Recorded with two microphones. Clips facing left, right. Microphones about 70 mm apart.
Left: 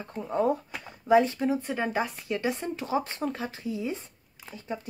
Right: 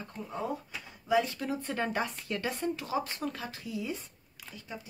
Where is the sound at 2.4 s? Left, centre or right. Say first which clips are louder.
Left 6 dB; centre.